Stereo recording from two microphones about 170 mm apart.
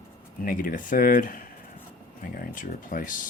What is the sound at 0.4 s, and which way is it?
Speech, 55° left (ahead or behind).